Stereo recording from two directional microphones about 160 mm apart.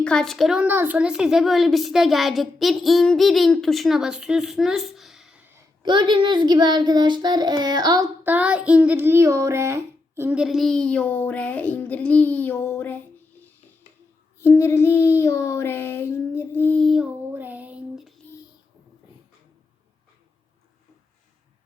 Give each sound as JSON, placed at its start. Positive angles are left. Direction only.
{"t": 0.0, "sound": "a woman's voice", "side_deg": 5}
{"t": 5.8, "sound": "child singing", "side_deg": -30}
{"t": 8.2, "sound": "a woman's voice", "side_deg": -10}
{"t": 14.4, "sound": "child singing", "side_deg": 15}
{"t": 17.3, "sound": "a sound", "side_deg": -10}